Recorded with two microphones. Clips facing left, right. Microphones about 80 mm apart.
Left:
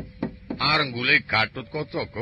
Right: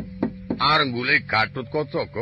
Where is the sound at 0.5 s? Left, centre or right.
Right.